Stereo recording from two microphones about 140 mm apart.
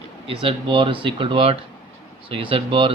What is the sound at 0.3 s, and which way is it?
Speech, 40° right (ahead or behind).